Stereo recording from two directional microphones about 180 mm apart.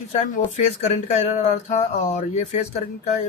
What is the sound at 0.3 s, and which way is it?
A man's voice, 40° left (ahead or behind).